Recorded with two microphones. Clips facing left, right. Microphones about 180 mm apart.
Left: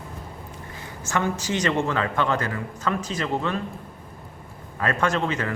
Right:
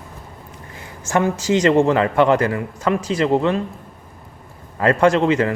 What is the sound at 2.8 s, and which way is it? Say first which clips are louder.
Speech: right 7 dB; 10° right (ahead or behind).